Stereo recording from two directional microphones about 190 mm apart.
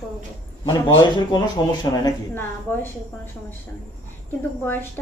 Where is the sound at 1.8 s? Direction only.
20° left (ahead or behind).